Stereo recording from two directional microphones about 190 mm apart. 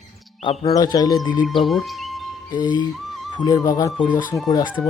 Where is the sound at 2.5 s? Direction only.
20° left (ahead or behind).